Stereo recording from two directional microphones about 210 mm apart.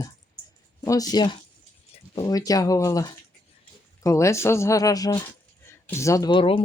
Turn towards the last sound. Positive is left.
turn(degrees=25)  # may be behind; listen again after turning